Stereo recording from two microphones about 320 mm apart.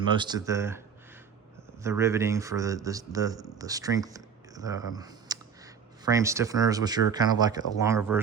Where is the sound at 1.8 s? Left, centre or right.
Centre.